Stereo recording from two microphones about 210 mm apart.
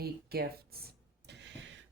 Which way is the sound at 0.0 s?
45° right (ahead or behind).